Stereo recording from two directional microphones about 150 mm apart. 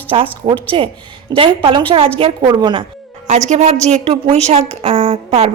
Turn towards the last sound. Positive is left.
turn(degrees=-45)  # may be behind; listen again after turning